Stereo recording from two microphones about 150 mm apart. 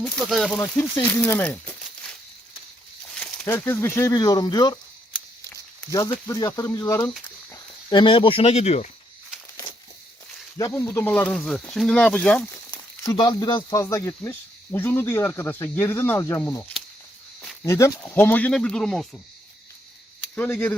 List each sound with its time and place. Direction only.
0.0 s speech: centre (ahead or behind)
0.5 s speech: 20° left (ahead or behind)
3.1 s a sound: 5° left (ahead or behind)
3.4 s speech: 15° left (ahead or behind)
6.2 s speech: 20° left (ahead or behind)
7.5 s speech: 30° left (ahead or behind)
10.6 s speech: 20° left (ahead or behind)
13.0 s speech: 25° left (ahead or behind); by 19.2 s 5° left (ahead or behind)
20.3 s speech: 10° left (ahead or behind)